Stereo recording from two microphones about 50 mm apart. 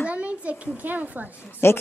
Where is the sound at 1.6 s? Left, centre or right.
Left.